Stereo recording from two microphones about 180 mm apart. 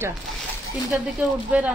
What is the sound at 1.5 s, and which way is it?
Speech, 5° right (ahead or behind).